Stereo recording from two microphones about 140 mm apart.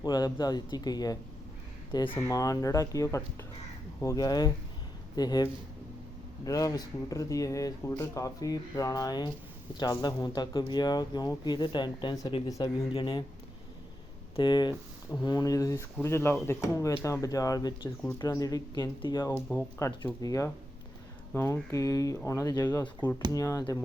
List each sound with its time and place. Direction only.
0.0 s speech: 30° left (ahead or behind)
14.3 s speech: 30° left (ahead or behind)